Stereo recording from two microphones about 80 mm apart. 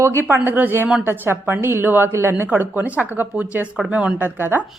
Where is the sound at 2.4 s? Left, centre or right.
Centre.